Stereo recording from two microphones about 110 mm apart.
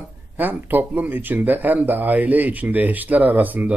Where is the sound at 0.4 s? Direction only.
15° right (ahead or behind).